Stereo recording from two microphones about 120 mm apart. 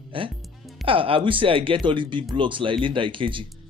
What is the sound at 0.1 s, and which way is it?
Speech, 50° right (ahead or behind).